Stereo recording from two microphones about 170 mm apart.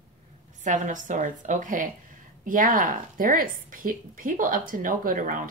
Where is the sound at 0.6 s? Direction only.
50° right (ahead or behind).